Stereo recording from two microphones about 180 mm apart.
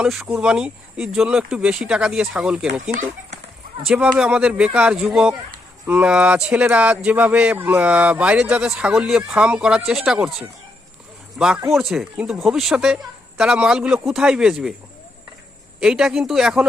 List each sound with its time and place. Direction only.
0.0 s speech: 5° right (ahead or behind)
3.8 s speech: 5° right (ahead or behind)
5.3 s a sound: 20° right (ahead or behind)
5.9 s speech: 5° right (ahead or behind)
11.3 s speech: 5° right (ahead or behind)
15.8 s speech: 5° right (ahead or behind)